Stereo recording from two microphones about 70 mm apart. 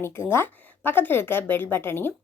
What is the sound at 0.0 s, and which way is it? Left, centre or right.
Speech, left.